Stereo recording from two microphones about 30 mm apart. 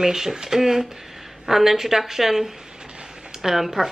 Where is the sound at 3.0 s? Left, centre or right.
Centre.